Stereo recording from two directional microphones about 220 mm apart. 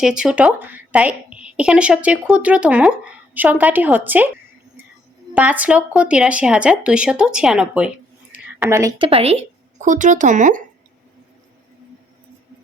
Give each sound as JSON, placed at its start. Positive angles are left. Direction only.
{"t": 0.0, "sound": "a woman's voice", "side_deg": -5}
{"t": 5.3, "sound": "a woman's voice", "side_deg": -5}
{"t": 9.0, "sound": "speech", "side_deg": -25}